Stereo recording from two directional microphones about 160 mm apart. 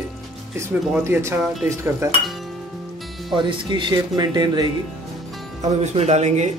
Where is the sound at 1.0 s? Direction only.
15° right (ahead or behind).